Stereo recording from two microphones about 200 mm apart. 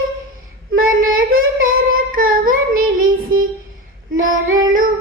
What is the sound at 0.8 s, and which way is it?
Child singing, 45° right (ahead or behind).